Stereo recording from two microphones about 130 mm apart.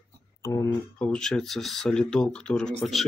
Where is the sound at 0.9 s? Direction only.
5° left (ahead or behind).